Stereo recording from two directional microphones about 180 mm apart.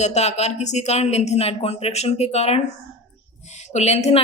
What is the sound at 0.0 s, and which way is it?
Speech, 40° left (ahead or behind).